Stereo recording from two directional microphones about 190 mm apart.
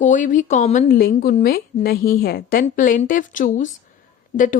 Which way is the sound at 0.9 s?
50° left (ahead or behind).